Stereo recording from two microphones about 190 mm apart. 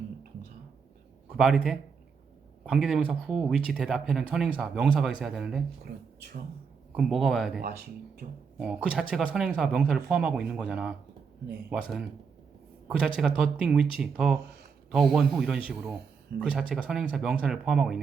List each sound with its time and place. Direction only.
1.3 s speech: centre (ahead or behind)
5.8 s speech: 60° right (ahead or behind)
6.9 s speech: centre (ahead or behind)
7.6 s speech: 50° right (ahead or behind)
8.5 s speech: 5° right (ahead or behind)